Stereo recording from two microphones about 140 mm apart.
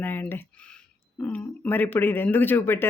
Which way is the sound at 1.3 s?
15° left (ahead or behind).